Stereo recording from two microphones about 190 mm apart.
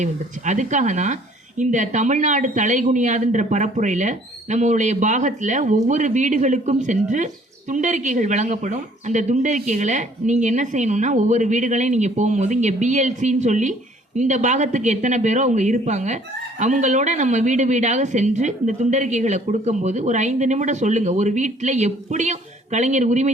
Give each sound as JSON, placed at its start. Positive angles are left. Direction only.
{"t": 0.0, "sound": "speech", "side_deg": -40}